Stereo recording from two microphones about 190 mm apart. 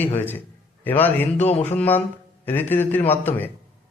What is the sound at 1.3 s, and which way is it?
Speech, 35° left (ahead or behind).